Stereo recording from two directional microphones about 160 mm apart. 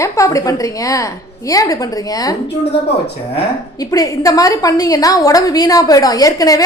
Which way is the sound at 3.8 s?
20° left (ahead or behind).